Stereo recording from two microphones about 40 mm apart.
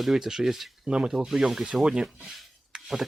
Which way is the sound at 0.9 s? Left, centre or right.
Right.